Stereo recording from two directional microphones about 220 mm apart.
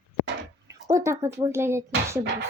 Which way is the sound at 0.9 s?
15° right (ahead or behind).